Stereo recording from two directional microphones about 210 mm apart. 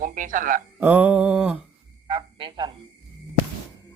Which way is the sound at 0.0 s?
40° right (ahead or behind).